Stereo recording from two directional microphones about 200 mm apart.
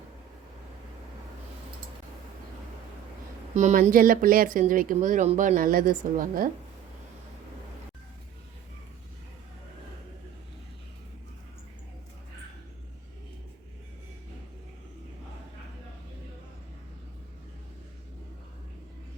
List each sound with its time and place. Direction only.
3.5 s speech: 40° right (ahead or behind)